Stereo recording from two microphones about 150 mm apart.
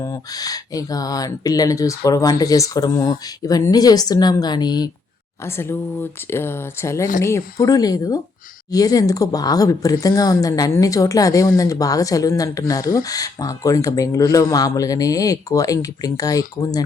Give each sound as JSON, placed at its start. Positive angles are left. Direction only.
{"t": 0.0, "sound": "speech", "side_deg": 20}
{"t": 5.5, "sound": "speech", "side_deg": 15}